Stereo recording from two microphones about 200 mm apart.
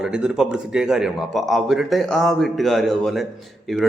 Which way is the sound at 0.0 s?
5° right (ahead or behind).